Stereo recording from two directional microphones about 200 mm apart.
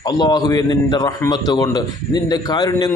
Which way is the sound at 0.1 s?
20° left (ahead or behind).